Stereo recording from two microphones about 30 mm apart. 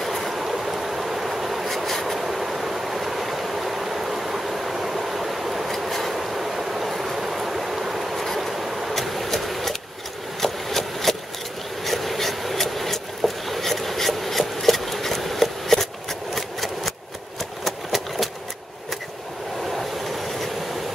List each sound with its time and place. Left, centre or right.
0.0 s vehicle: centre
1.9 s vehicle: centre
2.1 s vehicle: centre
5.9 s vehicle: centre
6.1 s a sound: centre
8.9 s vehicle: centre
10.4 s a sound: centre
11.8 s vehicle: centre
17.4 s a sound: centre
19.7 s train: centre